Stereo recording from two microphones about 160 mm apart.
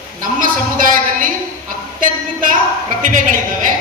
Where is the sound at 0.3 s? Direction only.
60° right (ahead or behind).